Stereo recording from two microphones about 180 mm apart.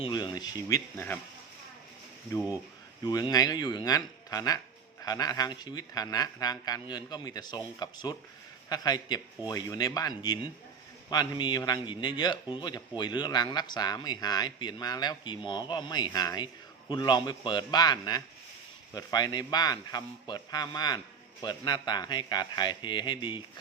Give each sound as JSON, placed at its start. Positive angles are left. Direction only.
{"t": 0.0, "sound": "speech", "side_deg": 25}
{"t": 3.0, "sound": "speech", "side_deg": 20}